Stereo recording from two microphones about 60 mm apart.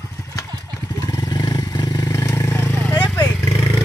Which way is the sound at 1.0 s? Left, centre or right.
Left.